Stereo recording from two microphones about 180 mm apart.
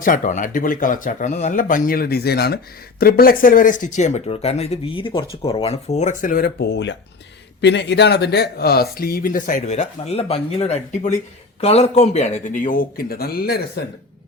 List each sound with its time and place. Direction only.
0.0 s speech: 45° left (ahead or behind)